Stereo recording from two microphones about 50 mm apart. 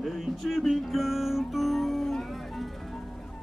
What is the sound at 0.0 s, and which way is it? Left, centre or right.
Music, centre.